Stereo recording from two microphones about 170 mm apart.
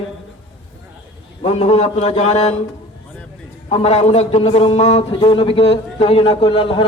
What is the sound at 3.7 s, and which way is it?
A man's voice, 35° left (ahead or behind).